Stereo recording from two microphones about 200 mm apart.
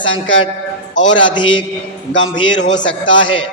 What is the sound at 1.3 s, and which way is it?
Speech, 25° left (ahead or behind).